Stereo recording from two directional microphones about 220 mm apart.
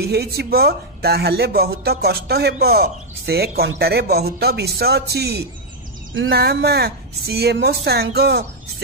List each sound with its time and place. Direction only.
0.0 s speech: 45° right (ahead or behind)